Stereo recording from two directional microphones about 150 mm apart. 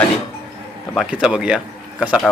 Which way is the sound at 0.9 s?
5° right (ahead or behind).